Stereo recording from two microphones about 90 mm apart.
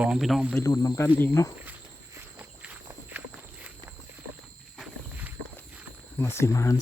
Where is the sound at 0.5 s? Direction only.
45° left (ahead or behind).